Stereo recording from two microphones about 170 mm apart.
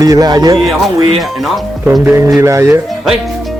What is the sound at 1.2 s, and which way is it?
Speech, centre (ahead or behind).